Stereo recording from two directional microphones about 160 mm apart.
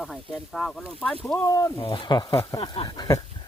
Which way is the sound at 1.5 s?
20° left (ahead or behind).